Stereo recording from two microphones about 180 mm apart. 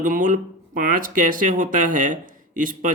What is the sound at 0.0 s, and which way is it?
Speech, 45° right (ahead or behind).